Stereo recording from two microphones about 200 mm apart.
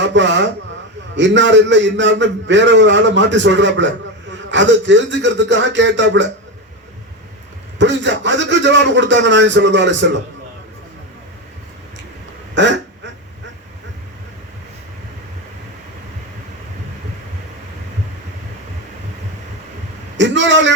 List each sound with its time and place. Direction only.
0.0 s a man's voice: 65° right (ahead or behind)
7.8 s a man's voice: 65° right (ahead or behind)
12.5 s quack: 65° right (ahead or behind)
20.1 s a sound: 65° right (ahead or behind)